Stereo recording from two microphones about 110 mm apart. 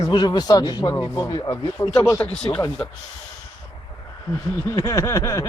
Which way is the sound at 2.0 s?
25° left (ahead or behind).